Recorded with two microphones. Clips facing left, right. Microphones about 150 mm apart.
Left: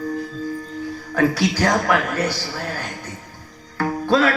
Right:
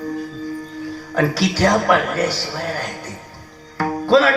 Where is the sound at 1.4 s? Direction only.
30° right (ahead or behind).